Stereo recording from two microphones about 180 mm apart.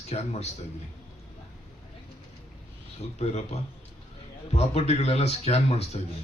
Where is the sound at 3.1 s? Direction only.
35° left (ahead or behind).